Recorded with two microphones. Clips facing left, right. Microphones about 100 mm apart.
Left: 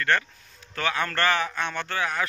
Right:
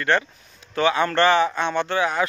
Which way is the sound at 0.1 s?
20° right (ahead or behind).